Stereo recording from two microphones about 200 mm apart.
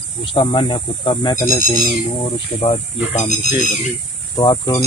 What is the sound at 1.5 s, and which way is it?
Speech, 40° left (ahead or behind).